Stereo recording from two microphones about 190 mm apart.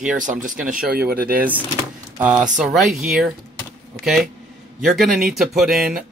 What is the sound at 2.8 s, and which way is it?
Speech, 5° right (ahead or behind).